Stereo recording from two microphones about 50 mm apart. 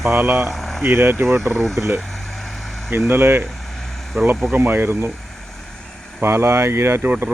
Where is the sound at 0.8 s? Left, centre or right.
Right.